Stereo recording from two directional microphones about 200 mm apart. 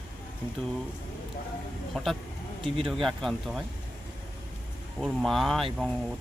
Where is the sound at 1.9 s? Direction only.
Centre (ahead or behind).